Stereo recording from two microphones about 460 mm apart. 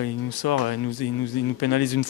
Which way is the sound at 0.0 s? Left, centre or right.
Left.